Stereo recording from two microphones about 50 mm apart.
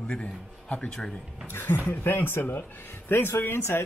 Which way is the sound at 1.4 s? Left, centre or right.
Left.